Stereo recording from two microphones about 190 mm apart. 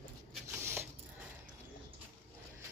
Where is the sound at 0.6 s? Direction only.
15° right (ahead or behind).